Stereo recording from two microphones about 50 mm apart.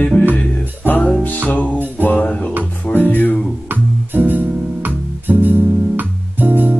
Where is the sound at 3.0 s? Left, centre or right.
Left.